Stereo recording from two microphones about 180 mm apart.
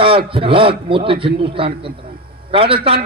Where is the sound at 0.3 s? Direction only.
30° right (ahead or behind).